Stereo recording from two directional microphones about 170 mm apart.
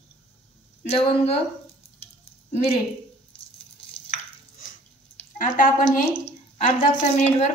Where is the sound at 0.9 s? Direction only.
35° left (ahead or behind).